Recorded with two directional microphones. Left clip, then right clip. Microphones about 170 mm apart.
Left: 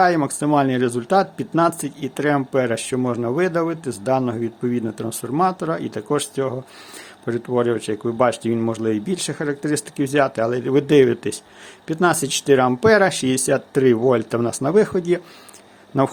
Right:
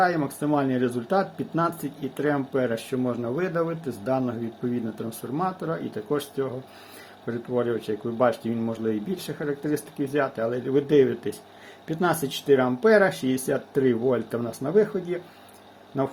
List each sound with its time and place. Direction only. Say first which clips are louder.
0.0 s speech: left 6 dB; 50° left (ahead or behind)
11.9 s speech: left 6 dB; 50° left (ahead or behind)